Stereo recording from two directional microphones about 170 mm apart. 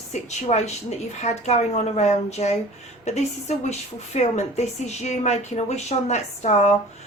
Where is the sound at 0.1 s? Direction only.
40° left (ahead or behind).